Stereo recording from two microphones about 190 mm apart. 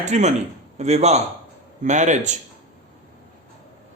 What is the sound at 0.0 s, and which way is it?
A man's voice, 40° right (ahead or behind).